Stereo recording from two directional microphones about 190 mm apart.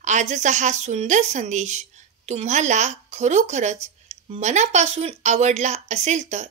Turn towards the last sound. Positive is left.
turn(degrees=-40)  # may be behind; listen again after turning